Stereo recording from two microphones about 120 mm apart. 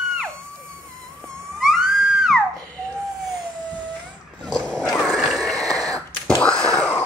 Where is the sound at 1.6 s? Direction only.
Centre (ahead or behind).